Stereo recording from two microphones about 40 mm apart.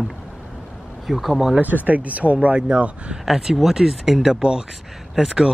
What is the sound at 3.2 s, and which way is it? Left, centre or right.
Speech, centre.